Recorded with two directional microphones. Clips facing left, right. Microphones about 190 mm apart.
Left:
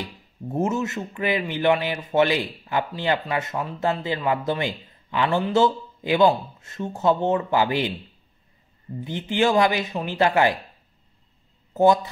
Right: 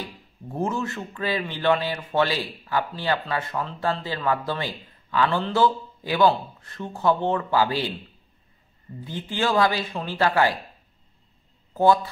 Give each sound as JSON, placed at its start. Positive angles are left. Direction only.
{"t": 0.5, "sound": "a man's voice", "side_deg": 20}
{"t": 9.0, "sound": "a man's voice", "side_deg": 20}
{"t": 11.7, "sound": "speech", "side_deg": 20}